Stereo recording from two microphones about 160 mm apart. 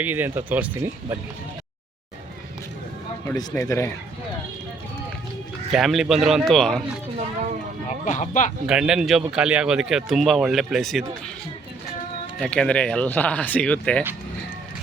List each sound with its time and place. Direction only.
0.0 s speech: 10° right (ahead or behind)
3.2 s speech: 15° left (ahead or behind)
5.7 s speech: centre (ahead or behind)
7.9 s speech: 45° left (ahead or behind)
8.6 s speech: 5° right (ahead or behind)
12.4 s speech: 5° left (ahead or behind)